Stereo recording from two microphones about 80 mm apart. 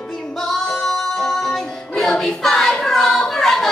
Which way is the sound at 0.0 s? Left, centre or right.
Centre.